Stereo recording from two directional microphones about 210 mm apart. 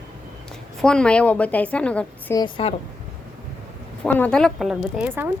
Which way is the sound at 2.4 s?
25° left (ahead or behind).